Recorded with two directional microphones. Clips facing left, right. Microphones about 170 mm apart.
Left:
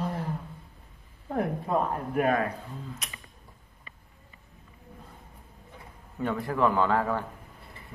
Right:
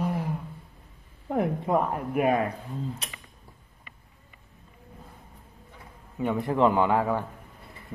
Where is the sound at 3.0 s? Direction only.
30° right (ahead or behind).